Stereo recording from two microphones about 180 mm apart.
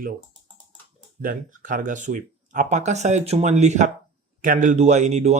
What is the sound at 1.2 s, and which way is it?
Speech, 50° right (ahead or behind).